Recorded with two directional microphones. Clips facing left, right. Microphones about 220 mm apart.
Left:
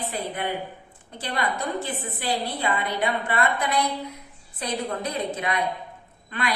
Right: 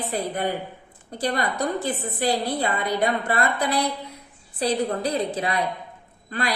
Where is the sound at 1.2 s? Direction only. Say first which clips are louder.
Right 4 dB; 40° right (ahead or behind).